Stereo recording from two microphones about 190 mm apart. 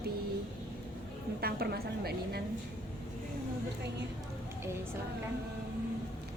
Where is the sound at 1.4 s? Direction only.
55° right (ahead or behind).